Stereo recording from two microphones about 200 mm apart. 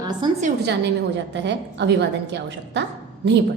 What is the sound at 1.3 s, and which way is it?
A woman's voice, 60° right (ahead or behind).